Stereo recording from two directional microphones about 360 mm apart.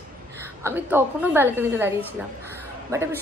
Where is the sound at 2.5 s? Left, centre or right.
Centre.